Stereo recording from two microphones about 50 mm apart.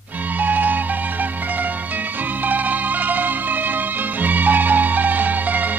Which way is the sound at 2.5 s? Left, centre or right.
Right.